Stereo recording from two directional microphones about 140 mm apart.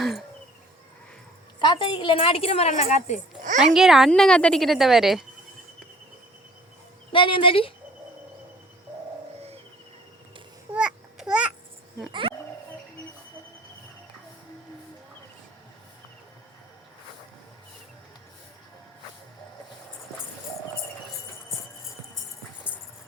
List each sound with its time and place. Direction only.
0.0 s a sound: centre (ahead or behind)
1.5 s a woman's voice: 35° left (ahead or behind); by 3.2 s 55° left (ahead or behind)
3.8 s a woman's voice: 5° right (ahead or behind)
7.1 s speech: 35° left (ahead or behind)
10.8 s babbling: 5° right (ahead or behind)